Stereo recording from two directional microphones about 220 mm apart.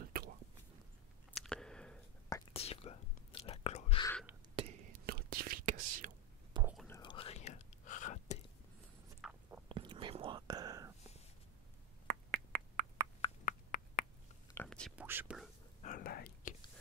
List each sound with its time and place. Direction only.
0.0 s a sound: 40° right (ahead or behind)
1.3 s a sound: centre (ahead or behind)
2.5 s whispering: 25° left (ahead or behind)
4.6 s whispering: 25° right (ahead or behind)
5.0 s whispering: 45° right (ahead or behind)
6.6 s whispering: 5° right (ahead or behind)
6.9 s whispering: 20° left (ahead or behind)
9.2 s biting: centre (ahead or behind)
9.8 s whispering: 25° right (ahead or behind)
12.1 s finger snapping: 45° right (ahead or behind)
13.5 s a sound: 40° left (ahead or behind)
14.5 s whispering: 5° left (ahead or behind)
15.8 s whispering: 40° left (ahead or behind)